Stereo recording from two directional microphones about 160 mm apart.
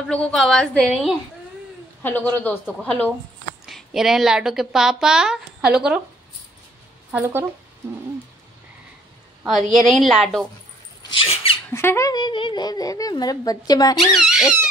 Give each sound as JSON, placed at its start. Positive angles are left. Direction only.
{"t": 0.1, "sound": "a woman's voice", "side_deg": 5}
{"t": 7.1, "sound": "speech", "side_deg": -10}
{"t": 9.5, "sound": "a woman's voice", "side_deg": 0}
{"t": 11.1, "sound": "squeak", "side_deg": 35}
{"t": 11.7, "sound": "speech", "side_deg": 15}
{"t": 12.1, "sound": "a woman's voice", "side_deg": 30}
{"t": 14.1, "sound": "a woman's voice", "side_deg": -5}